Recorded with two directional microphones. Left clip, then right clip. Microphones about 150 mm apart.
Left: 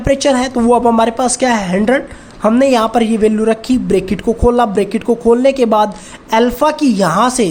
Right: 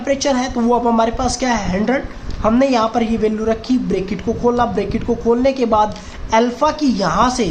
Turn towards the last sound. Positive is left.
turn(degrees=45)  # may be behind; listen again after turning